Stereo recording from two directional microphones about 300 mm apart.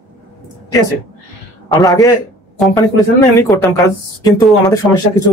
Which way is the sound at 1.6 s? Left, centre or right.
Centre.